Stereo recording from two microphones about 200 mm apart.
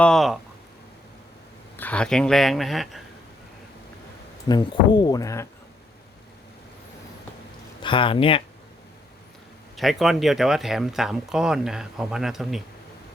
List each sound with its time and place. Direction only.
0.0 s speech: centre (ahead or behind)
1.7 s speech: 10° left (ahead or behind)
4.4 s speech: 20° left (ahead or behind)
7.8 s speech: 25° left (ahead or behind)
9.7 s speech: centre (ahead or behind)